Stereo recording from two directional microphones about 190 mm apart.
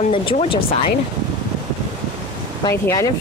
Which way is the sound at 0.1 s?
30° left (ahead or behind).